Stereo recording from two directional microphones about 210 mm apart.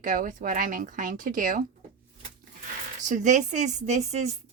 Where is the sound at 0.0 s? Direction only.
40° right (ahead or behind).